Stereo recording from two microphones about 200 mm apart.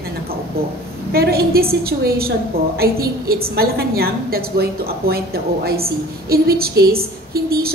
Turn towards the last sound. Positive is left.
turn(degrees=-50)  # may be behind; listen again after turning